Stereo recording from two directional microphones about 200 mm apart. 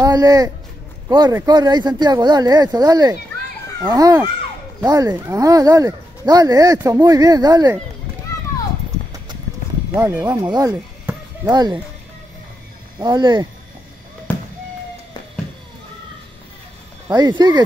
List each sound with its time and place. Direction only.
0.0 s speech: 20° right (ahead or behind)
9.9 s speech: 10° right (ahead or behind)
11.4 s speech: 20° right (ahead or behind)
13.0 s speech: 20° right (ahead or behind)
14.3 s fireworks: 10° left (ahead or behind)
17.1 s speech: 20° right (ahead or behind)